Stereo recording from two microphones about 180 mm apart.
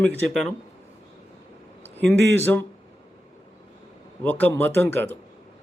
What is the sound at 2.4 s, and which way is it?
Speech, 15° left (ahead or behind).